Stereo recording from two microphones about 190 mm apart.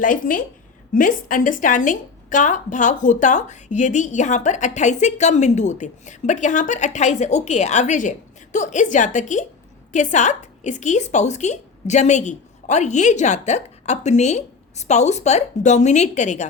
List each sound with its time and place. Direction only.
0.0 s a woman's voice: 45° left (ahead or behind)